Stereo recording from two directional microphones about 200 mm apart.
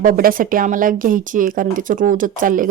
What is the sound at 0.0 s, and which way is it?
Speech, 45° right (ahead or behind).